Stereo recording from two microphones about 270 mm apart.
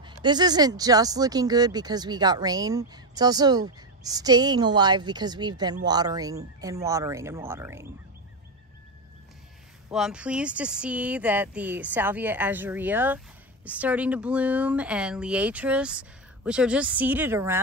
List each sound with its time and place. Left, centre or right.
0.0 s speech: centre
9.8 s speech: centre